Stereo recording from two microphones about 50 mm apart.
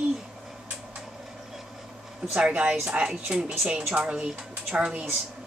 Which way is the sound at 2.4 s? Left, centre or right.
Right.